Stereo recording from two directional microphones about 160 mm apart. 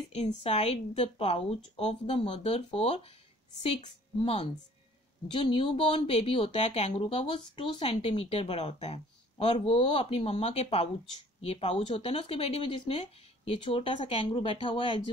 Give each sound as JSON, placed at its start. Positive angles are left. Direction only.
{"t": 0.1, "sound": "speech", "side_deg": 45}